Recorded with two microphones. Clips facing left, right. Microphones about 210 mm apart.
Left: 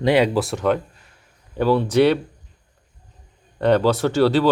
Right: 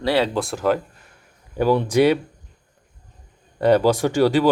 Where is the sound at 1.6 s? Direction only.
15° right (ahead or behind).